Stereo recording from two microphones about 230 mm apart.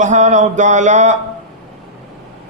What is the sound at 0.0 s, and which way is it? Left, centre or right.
A man's voice, right.